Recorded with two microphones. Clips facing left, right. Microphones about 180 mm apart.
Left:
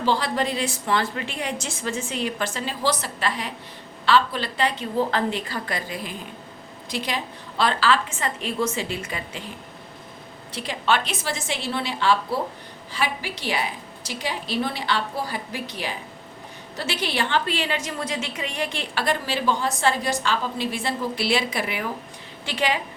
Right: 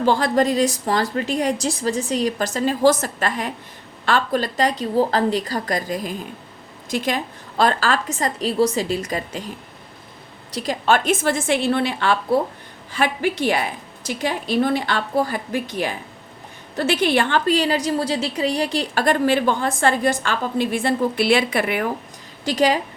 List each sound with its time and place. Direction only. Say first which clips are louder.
0.0 s a woman's voice: right 6 dB; 50° right (ahead or behind)
10.5 s a woman's voice: right 5 dB; 40° right (ahead or behind); by 21.8 s 55° right (ahead or behind)
22.4 s a woman's voice: right 7 dB; 40° right (ahead or behind)